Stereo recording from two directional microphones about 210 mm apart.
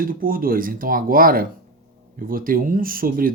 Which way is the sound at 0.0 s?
40° right (ahead or behind).